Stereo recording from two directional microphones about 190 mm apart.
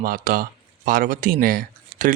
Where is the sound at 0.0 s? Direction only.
50° right (ahead or behind).